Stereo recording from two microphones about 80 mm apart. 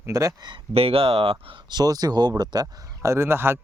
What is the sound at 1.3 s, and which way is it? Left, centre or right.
Speech, right.